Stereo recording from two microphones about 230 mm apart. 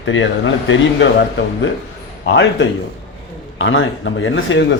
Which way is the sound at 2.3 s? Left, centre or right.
Left.